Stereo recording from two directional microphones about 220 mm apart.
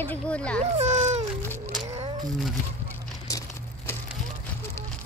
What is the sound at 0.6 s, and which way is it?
Speech, 30° right (ahead or behind).